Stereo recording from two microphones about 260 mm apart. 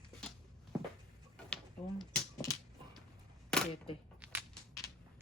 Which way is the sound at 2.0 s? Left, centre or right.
Centre.